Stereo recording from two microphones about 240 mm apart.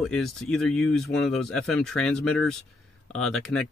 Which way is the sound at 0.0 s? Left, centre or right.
Centre.